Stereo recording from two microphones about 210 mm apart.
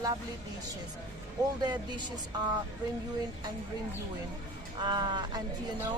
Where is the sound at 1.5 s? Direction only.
20° right (ahead or behind).